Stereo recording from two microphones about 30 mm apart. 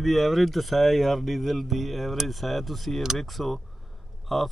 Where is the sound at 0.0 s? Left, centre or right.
Centre.